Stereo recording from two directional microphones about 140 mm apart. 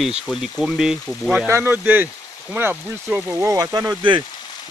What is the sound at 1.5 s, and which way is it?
Speech, 15° right (ahead or behind).